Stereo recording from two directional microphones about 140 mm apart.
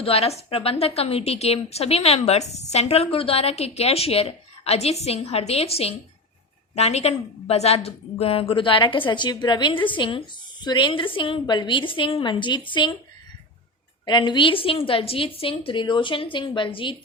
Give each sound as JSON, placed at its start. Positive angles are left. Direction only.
{"t": 0.0, "sound": "a woman's voice", "side_deg": 45}
{"t": 14.0, "sound": "a woman's voice", "side_deg": 35}